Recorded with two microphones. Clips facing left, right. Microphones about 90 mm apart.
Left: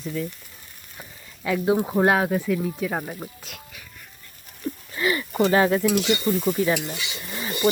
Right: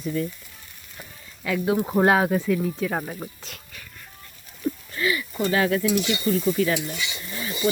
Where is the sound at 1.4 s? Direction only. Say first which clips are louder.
Left 2 dB; 20° left (ahead or behind).